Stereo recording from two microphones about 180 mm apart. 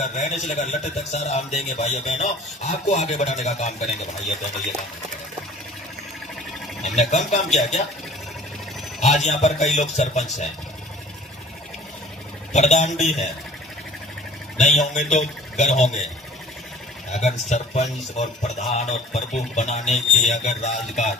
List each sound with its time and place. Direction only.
0.0 s speech: 40° left (ahead or behind)
6.8 s speech: 40° left (ahead or behind)
9.0 s speech: 40° left (ahead or behind)
12.5 s speech: 40° left (ahead or behind)
14.6 s speech: 45° left (ahead or behind)
17.1 s speech: 40° left (ahead or behind)